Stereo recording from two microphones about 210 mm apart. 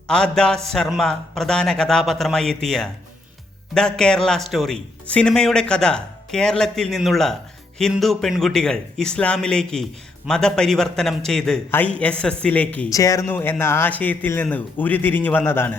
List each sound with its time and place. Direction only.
0.1 s speech: 5° left (ahead or behind)